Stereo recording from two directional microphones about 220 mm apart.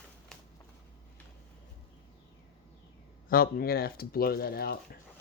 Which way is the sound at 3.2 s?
40° left (ahead or behind).